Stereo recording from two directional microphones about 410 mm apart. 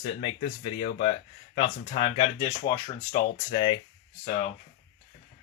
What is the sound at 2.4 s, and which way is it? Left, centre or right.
Speech, centre.